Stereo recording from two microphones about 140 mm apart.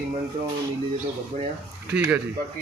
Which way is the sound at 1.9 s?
5° right (ahead or behind).